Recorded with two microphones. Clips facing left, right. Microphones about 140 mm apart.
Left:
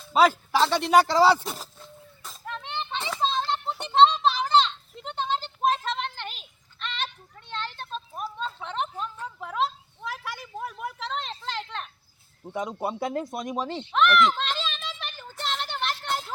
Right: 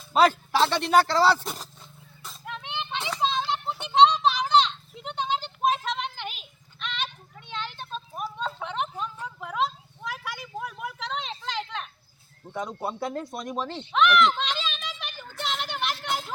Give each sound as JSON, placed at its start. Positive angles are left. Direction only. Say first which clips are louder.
{"t": 0.0, "sound": "a sound", "louder": "even", "side_deg": 5}
{"t": 0.6, "sound": "speech", "louder": "left 1 dB", "side_deg": 5}
{"t": 1.5, "sound": "children playing", "louder": "left 1 dB", "side_deg": 5}
{"t": 3.2, "sound": "a sound", "louder": "even", "side_deg": -5}
{"t": 9.4, "sound": "vehicle", "louder": "even", "side_deg": 5}
{"t": 12.6, "sound": "speech", "louder": "left 2 dB", "side_deg": 15}
{"t": 13.0, "sound": "speech", "louder": "left 3 dB", "side_deg": 0}
{"t": 13.5, "sound": "speech", "louder": "even", "side_deg": 15}
{"t": 13.9, "sound": "a sound", "louder": "even", "side_deg": 0}